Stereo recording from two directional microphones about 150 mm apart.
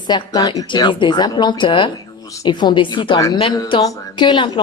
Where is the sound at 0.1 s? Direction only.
25° left (ahead or behind).